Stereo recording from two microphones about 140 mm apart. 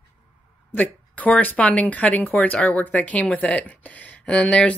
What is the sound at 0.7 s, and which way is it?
Speech, 10° left (ahead or behind).